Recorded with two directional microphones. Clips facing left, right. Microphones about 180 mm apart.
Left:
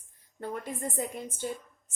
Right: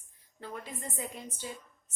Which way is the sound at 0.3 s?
50° left (ahead or behind).